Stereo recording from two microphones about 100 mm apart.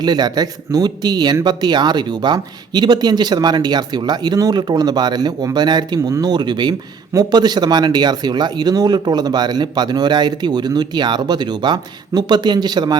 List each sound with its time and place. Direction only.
0.0 s a man's voice: 45° right (ahead or behind)
6.0 s speech: 30° right (ahead or behind)
6.3 s a man's voice: 45° right (ahead or behind)